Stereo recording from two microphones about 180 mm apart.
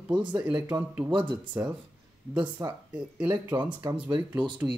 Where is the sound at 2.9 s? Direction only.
5° right (ahead or behind).